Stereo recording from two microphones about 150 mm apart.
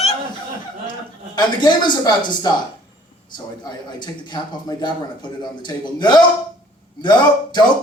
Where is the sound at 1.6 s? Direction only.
30° left (ahead or behind).